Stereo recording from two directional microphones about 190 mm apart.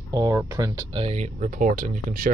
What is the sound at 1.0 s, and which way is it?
Speech, 35° right (ahead or behind).